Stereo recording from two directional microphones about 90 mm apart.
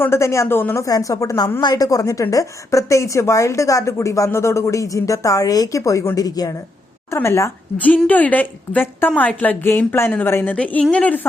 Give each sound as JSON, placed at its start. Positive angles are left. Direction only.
{"t": 0.0, "sound": "speech", "side_deg": 30}
{"t": 0.9, "sound": "speech", "side_deg": 40}
{"t": 7.1, "sound": "speech", "side_deg": 30}
{"t": 7.8, "sound": "a woman's voice", "side_deg": 15}